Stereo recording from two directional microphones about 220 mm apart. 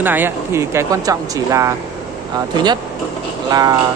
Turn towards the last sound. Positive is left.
turn(degrees=-15)  # may be behind; listen again after turning